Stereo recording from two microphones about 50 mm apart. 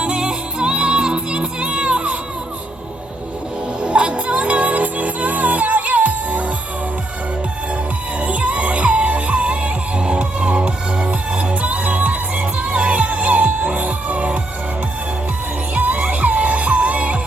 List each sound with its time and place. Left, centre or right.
0.0 s music: centre
3.8 s music: right
8.2 s music: right
15.7 s music: right